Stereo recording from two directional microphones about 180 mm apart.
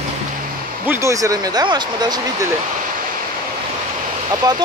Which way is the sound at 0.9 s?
15° right (ahead or behind).